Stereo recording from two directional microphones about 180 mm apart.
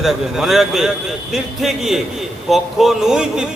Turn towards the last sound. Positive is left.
turn(degrees=-5)  # may be behind; listen again after turning